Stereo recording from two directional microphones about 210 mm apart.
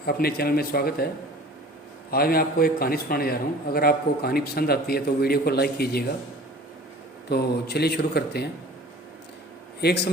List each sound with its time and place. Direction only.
0.0 s a man's voice: 45° left (ahead or behind)
7.3 s a man's voice: 50° left (ahead or behind)
9.8 s a man's voice: 55° left (ahead or behind)